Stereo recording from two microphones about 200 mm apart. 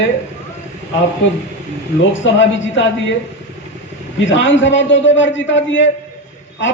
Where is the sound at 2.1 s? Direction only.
70° left (ahead or behind).